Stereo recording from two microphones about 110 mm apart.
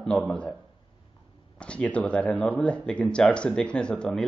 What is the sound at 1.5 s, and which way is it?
Speech, 10° left (ahead or behind).